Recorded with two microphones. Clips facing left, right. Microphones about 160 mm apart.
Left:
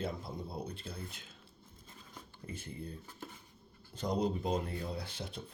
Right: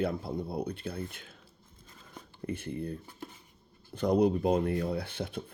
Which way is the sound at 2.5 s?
60° right (ahead or behind).